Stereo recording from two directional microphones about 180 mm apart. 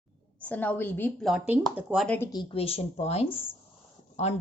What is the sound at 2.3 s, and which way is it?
A woman's voice, 25° left (ahead or behind).